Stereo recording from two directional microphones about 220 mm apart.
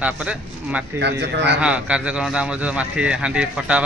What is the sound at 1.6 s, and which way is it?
A man's voice, 5° right (ahead or behind).